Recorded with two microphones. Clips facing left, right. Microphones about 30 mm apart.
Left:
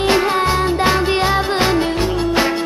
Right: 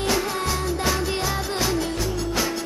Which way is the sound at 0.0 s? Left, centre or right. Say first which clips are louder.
Left 9 dB; left.